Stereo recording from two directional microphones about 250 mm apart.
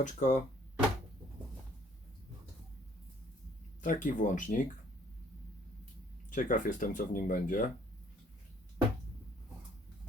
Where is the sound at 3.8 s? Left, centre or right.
Left.